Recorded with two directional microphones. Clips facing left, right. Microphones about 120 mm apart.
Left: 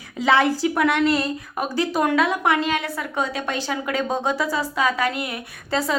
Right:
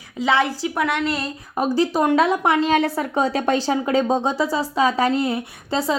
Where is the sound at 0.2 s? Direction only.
25° right (ahead or behind).